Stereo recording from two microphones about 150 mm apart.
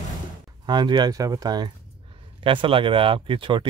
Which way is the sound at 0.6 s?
30° right (ahead or behind).